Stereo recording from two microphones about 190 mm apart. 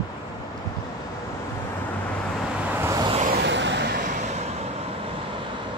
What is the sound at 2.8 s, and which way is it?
Vehicle, 20° right (ahead or behind).